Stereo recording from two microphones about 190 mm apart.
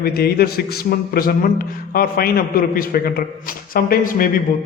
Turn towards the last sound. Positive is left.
turn(degrees=45)  # may be behind; listen again after turning